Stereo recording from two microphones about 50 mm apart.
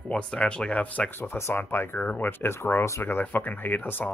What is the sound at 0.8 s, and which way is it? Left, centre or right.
Speech, left.